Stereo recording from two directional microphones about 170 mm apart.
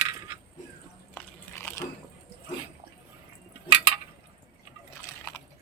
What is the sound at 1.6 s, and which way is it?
Biting, 15° left (ahead or behind).